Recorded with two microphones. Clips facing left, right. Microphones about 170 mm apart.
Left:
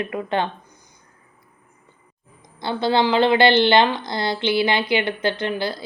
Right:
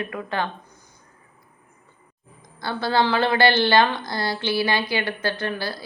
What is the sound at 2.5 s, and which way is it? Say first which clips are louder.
A woman's voice: left 2 dB; 20° left (ahead or behind).